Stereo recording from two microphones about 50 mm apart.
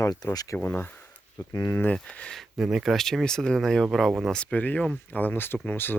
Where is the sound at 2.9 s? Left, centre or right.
Centre.